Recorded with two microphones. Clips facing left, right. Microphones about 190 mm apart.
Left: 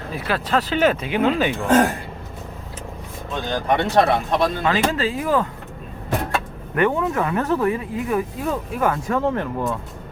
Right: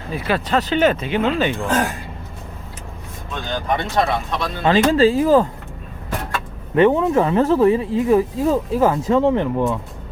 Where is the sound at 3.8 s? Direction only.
65° left (ahead or behind); by 4.5 s 50° left (ahead or behind).